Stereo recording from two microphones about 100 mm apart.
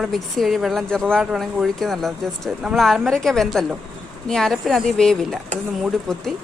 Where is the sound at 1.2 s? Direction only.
5° right (ahead or behind).